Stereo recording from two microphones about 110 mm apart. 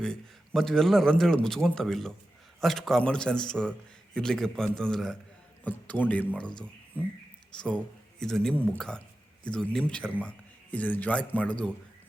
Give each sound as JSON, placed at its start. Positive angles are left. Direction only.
{"t": 0.0, "sound": "a man's voice", "side_deg": 5}
{"t": 5.6, "sound": "speech", "side_deg": 15}
{"t": 7.6, "sound": "a man's voice", "side_deg": 10}